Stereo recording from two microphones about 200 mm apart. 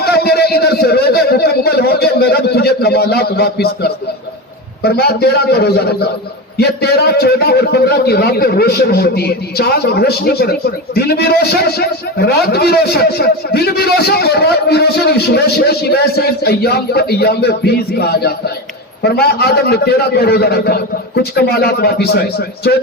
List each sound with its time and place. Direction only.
0.0 s a man's voice: 50° left (ahead or behind)